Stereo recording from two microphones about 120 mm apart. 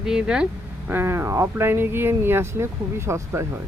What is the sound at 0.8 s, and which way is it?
Speech, 20° right (ahead or behind).